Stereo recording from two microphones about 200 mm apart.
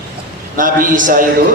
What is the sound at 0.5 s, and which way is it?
Speech, 40° right (ahead or behind).